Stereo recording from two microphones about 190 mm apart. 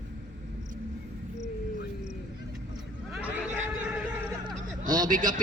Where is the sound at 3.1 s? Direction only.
10° right (ahead or behind).